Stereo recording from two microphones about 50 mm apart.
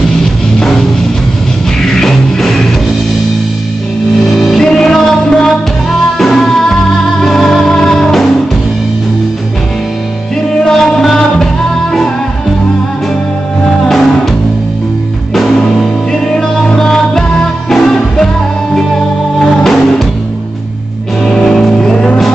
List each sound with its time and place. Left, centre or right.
1.8 s music: centre
4.2 s music: centre
10.6 s music: centre
13.7 s music: centre
15.7 s music: centre
19.4 s music: centre
21.2 s music: centre